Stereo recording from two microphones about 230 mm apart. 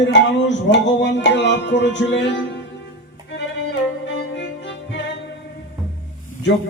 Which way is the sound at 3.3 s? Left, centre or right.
Left.